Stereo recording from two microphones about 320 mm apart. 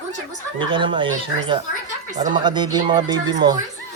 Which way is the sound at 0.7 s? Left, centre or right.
Centre.